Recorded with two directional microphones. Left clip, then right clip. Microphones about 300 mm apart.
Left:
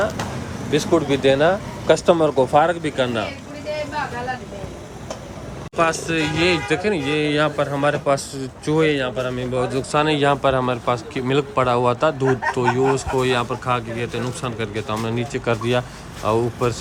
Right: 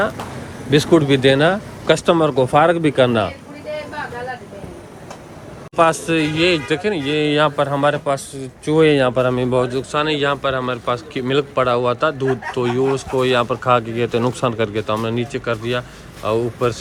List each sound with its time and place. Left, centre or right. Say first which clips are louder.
0.7 s speech: right 4 dB; right
5.7 s a man's voice: right 4 dB; centre